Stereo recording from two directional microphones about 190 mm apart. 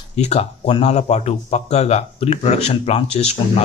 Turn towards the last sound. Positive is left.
turn(degrees=35)  # may be behind; listen again after turning